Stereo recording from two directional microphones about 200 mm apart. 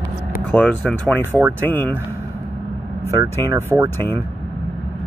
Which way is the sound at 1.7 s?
10° left (ahead or behind).